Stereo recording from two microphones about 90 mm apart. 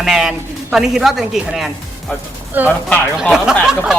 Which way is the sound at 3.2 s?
5° right (ahead or behind).